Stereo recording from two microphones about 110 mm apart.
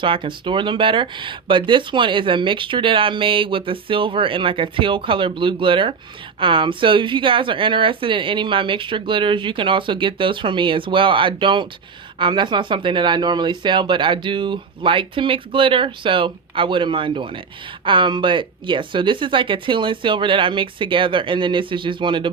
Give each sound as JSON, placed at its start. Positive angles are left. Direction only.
{"t": 0.0, "sound": "speech", "side_deg": -50}